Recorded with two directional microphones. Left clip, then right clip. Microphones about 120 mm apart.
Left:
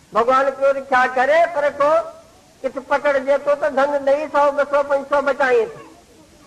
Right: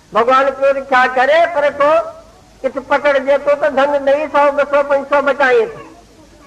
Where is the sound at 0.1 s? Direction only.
25° left (ahead or behind).